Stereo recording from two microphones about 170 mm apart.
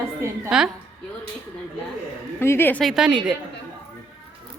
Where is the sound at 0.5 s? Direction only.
5° right (ahead or behind).